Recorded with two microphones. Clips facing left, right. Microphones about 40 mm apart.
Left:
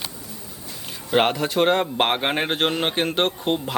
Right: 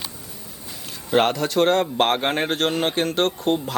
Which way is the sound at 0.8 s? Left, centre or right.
Centre.